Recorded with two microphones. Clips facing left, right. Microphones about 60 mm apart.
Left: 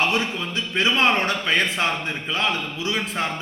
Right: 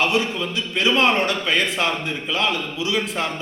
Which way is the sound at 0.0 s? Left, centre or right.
Left.